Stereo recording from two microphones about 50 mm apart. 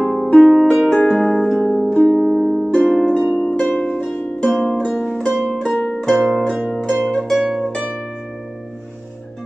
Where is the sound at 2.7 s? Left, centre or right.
Left.